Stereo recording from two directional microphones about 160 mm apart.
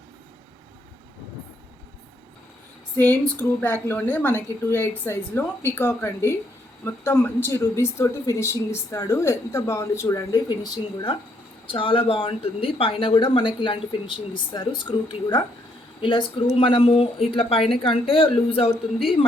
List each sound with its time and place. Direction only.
3.0 s a woman's voice: 10° left (ahead or behind); by 18.7 s 35° left (ahead or behind)